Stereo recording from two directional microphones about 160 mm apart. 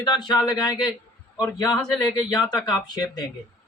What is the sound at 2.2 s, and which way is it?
A man's voice, 25° left (ahead or behind).